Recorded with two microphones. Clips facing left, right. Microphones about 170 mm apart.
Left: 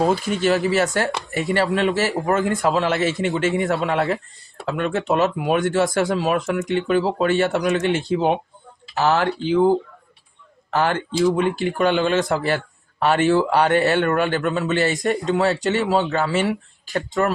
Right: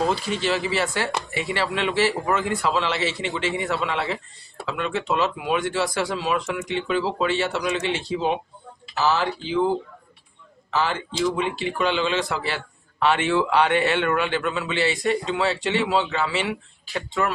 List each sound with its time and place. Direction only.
0.0 s speech: 50° left (ahead or behind)
10.7 s speech: 55° left (ahead or behind)